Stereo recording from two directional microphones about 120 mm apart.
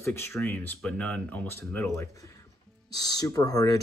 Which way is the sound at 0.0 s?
20° left (ahead or behind).